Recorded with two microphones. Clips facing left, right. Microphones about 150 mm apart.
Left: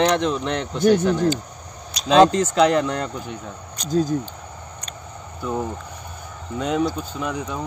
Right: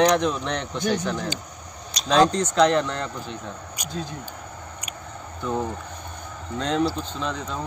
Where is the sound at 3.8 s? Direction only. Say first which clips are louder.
Left 5 dB; 10° right (ahead or behind).